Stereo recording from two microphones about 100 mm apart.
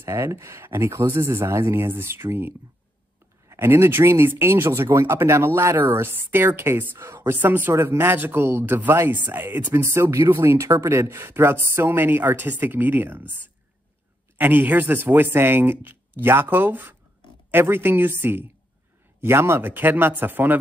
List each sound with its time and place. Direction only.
0.0 s speech: 30° right (ahead or behind)